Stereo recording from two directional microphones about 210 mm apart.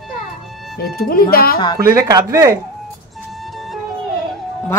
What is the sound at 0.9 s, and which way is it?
Speech, 45° left (ahead or behind).